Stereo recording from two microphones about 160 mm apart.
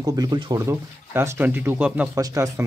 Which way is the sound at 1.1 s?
15° right (ahead or behind).